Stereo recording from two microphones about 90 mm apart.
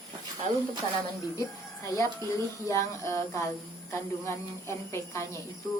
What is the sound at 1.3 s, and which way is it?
A woman's voice, 35° left (ahead or behind).